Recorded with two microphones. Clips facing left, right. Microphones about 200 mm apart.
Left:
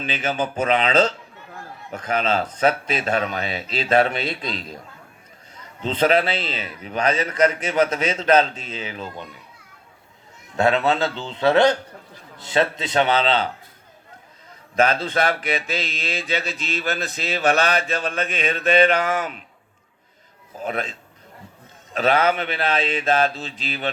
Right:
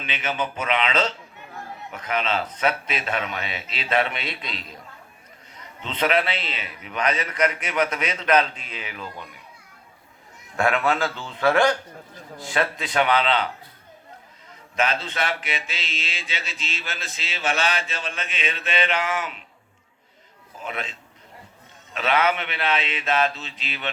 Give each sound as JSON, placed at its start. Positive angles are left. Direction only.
{"t": 0.0, "sound": "mantra", "side_deg": 35}
{"t": 5.8, "sound": "a man's voice", "side_deg": 35}
{"t": 10.6, "sound": "a man's voice", "side_deg": 25}
{"t": 15.3, "sound": "mantra", "side_deg": 40}
{"t": 19.0, "sound": "speech", "side_deg": 50}
{"t": 20.6, "sound": "mantra", "side_deg": 40}
{"t": 21.9, "sound": "mantra", "side_deg": 35}